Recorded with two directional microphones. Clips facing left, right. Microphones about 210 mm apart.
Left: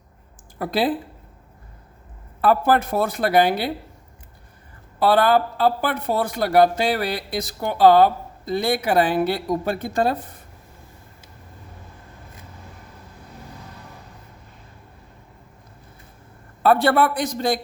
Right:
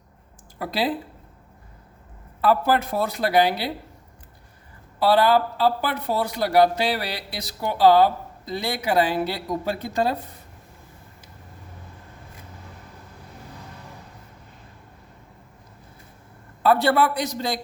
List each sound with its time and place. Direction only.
0.6 s a man's voice: 50° left (ahead or behind)
2.4 s a man's voice: 50° left (ahead or behind)
4.9 s a man's voice: 50° left (ahead or behind)
16.6 s a man's voice: 50° left (ahead or behind)